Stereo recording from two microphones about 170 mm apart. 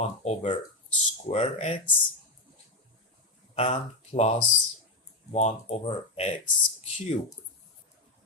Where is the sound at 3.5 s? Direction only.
40° left (ahead or behind).